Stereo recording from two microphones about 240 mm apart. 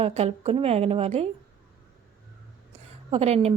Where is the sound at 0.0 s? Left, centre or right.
Right.